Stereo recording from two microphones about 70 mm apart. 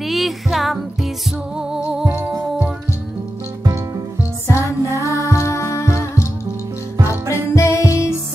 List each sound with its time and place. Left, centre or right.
0.0 s music: centre
4.5 s music: left
7.5 s music: left